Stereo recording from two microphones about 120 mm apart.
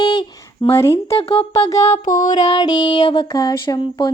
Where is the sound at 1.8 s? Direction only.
75° left (ahead or behind); by 2.3 s 90° left.